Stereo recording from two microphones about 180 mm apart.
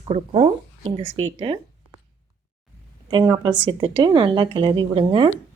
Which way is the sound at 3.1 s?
25° right (ahead or behind).